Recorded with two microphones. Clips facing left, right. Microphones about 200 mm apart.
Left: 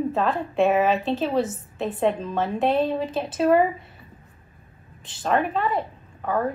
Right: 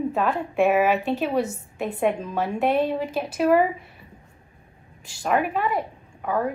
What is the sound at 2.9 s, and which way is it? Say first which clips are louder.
Speech: even; 25° left (ahead or behind).